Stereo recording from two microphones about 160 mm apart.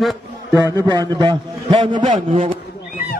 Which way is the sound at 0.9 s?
25° right (ahead or behind).